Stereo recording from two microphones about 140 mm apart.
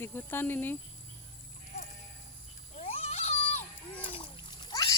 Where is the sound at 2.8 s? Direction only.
50° left (ahead or behind).